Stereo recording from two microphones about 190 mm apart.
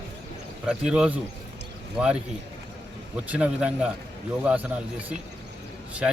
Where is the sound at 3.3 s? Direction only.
5° right (ahead or behind).